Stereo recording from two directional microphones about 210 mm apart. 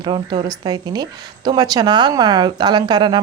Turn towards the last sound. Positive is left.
turn(degrees=-20)  # may be behind; listen again after turning